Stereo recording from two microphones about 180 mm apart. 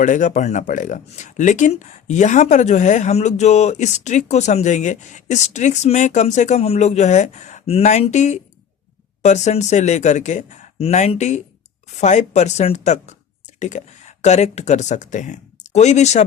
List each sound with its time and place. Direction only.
0.0 s speech: 45° left (ahead or behind)